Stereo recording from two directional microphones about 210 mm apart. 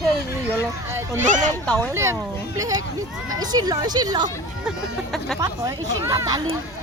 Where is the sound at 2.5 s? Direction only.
15° right (ahead or behind).